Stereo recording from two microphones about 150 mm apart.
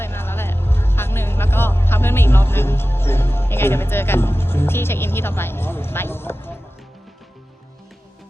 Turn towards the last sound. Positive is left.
turn(degrees=15)  # may be behind; listen again after turning